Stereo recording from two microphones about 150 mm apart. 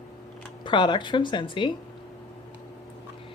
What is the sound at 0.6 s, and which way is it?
A woman's voice, 30° left (ahead or behind).